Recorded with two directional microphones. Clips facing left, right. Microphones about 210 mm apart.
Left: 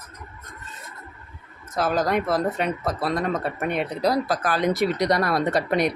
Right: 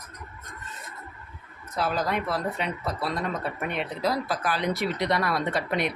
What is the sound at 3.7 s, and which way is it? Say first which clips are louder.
Speech: left 5 dB; 40° left (ahead or behind).